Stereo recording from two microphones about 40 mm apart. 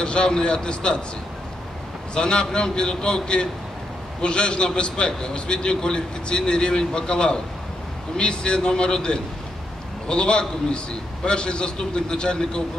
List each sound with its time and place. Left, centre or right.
0.0 s a man's voice: left
2.1 s a man's voice: left